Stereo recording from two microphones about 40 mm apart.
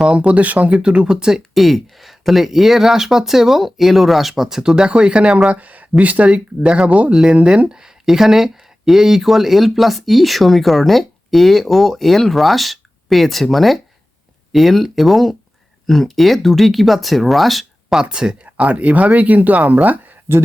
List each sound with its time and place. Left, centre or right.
0.0 s speech: right
0.7 s speech: right
1.5 s speech: centre; by 5.3 s right
5.5 s speech: right
7.1 s speech: centre
18.0 s speech: right
18.4 s speech: right